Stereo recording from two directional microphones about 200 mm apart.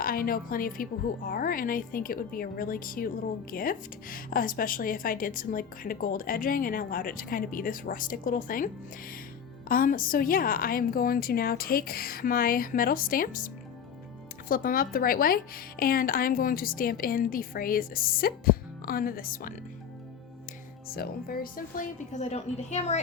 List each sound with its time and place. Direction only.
0.0 s speech: 45° left (ahead or behind)
20.8 s speech: 50° left (ahead or behind); by 23.0 s 35° left (ahead or behind)